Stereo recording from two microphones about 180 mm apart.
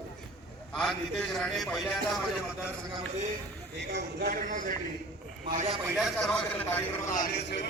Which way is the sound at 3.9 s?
70° right (ahead or behind).